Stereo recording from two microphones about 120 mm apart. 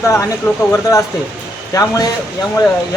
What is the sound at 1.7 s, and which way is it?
Speech, 30° left (ahead or behind).